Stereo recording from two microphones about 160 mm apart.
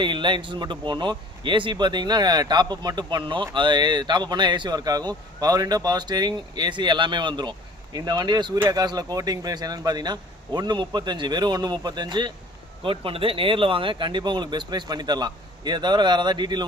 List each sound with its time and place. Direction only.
0.0 s a man's voice: 30° right (ahead or behind)